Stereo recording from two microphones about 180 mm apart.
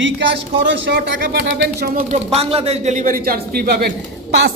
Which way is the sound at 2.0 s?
35° right (ahead or behind).